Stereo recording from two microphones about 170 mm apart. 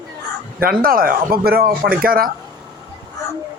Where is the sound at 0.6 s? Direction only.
60° right (ahead or behind).